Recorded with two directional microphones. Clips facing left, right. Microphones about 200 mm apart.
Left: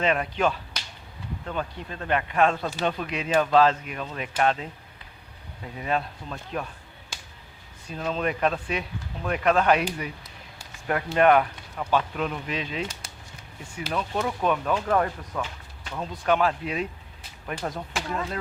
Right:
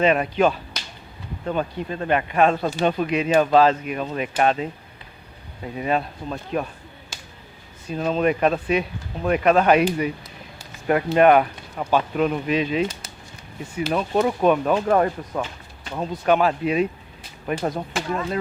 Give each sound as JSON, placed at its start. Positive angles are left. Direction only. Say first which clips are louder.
{"t": 0.0, "sound": "speech", "louder": "right 6 dB", "side_deg": -15}
{"t": 5.7, "sound": "speech", "louder": "right 4 dB", "side_deg": -10}
{"t": 7.9, "sound": "speech", "louder": "right 7 dB", "side_deg": -15}
{"t": 16.0, "sound": "speech", "louder": "right 4 dB", "side_deg": -15}